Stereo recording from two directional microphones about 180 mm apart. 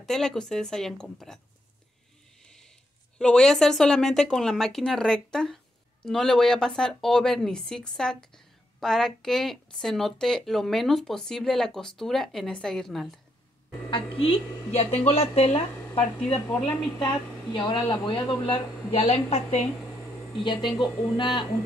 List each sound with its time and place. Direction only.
0.0 s speech: centre (ahead or behind)
2.4 s a sound: 5° left (ahead or behind)
3.2 s speech: 5° left (ahead or behind)
13.8 s a woman's voice: 30° left (ahead or behind)
20.4 s a woman's voice: 25° left (ahead or behind)